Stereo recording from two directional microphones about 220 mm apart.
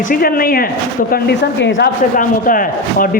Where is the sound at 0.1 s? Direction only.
40° left (ahead or behind).